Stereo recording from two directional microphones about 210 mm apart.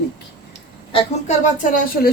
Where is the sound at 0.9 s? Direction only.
25° left (ahead or behind).